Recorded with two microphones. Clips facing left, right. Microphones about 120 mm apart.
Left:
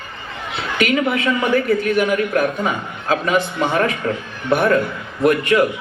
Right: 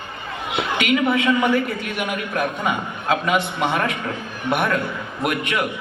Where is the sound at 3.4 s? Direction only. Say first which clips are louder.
Left 3 dB; 40° left (ahead or behind).